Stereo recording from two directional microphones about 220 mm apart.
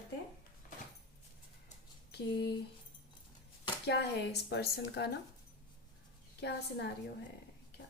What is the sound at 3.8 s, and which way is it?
A woman's voice, 50° left (ahead or behind).